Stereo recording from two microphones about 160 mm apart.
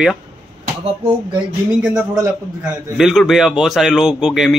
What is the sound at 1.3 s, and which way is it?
A man's voice, 10° right (ahead or behind).